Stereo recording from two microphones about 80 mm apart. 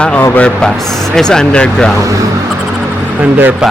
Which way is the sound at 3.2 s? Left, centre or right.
Centre.